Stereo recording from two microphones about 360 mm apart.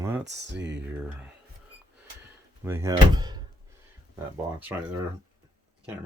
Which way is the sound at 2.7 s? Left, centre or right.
Centre.